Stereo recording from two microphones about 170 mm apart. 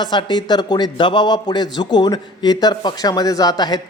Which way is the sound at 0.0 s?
25° left (ahead or behind).